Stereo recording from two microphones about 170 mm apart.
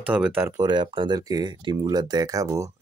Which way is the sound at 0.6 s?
30° right (ahead or behind).